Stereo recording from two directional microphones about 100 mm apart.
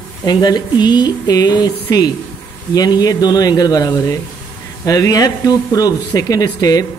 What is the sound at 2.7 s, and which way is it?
Speech, 40° left (ahead or behind).